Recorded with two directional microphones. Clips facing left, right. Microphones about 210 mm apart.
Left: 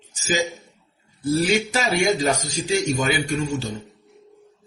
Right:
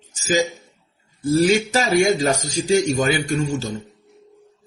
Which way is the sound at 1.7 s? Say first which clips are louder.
Right 4 dB; 40° right (ahead or behind).